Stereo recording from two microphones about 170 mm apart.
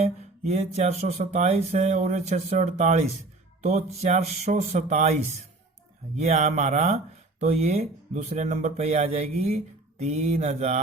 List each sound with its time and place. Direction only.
0.0 s speech: 40° right (ahead or behind)
6.1 s speech: 40° right (ahead or behind)